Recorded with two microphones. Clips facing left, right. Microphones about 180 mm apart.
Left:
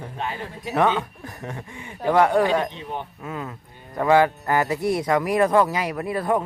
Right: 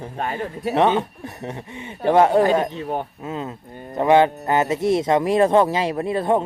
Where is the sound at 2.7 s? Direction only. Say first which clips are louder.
Right 6 dB; 45° right (ahead or behind).